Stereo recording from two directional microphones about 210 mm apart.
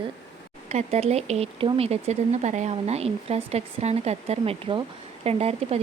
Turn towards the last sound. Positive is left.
turn(degrees=-30)  # may be behind; listen again after turning